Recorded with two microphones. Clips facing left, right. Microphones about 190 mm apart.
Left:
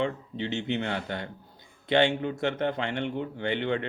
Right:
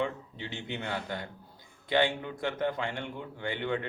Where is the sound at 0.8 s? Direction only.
70° left (ahead or behind).